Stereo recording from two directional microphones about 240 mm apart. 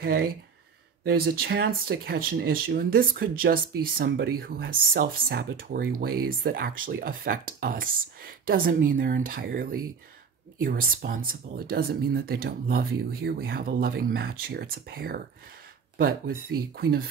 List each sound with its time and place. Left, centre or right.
0.0 s speech: right